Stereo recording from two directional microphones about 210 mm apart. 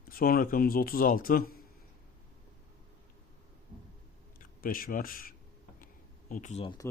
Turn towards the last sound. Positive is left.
turn(degrees=30)  # may be behind; listen again after turning